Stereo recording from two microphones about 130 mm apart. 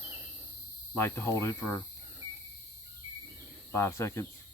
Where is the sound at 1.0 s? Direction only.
20° left (ahead or behind).